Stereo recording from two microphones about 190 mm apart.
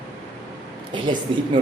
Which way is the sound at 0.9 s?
25° right (ahead or behind).